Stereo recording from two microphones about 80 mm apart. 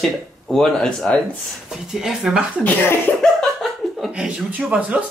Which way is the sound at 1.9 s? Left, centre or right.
Centre.